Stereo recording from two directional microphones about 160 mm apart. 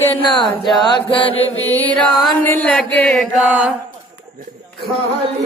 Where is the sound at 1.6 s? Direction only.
10° left (ahead or behind).